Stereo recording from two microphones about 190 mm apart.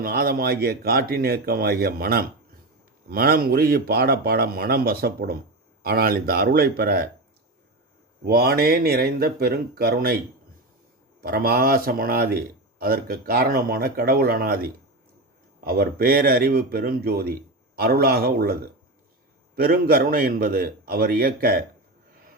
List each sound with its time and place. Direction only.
0.0 s speech: 50° right (ahead or behind)
8.2 s speech: 55° right (ahead or behind)
11.2 s speech: 50° right (ahead or behind)
19.5 s speech: 50° right (ahead or behind)